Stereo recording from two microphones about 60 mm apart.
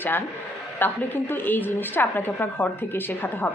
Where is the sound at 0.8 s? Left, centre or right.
Left.